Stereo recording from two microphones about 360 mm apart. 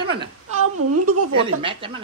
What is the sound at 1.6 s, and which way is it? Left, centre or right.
Speech, centre.